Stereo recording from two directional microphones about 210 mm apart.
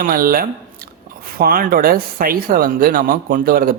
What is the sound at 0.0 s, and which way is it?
Speech, 45° right (ahead or behind).